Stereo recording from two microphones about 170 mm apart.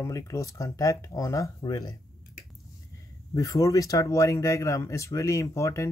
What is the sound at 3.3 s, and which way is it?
Speech, 20° left (ahead or behind).